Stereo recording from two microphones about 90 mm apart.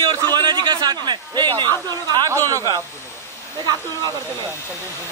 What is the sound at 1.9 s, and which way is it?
Speech, 50° right (ahead or behind).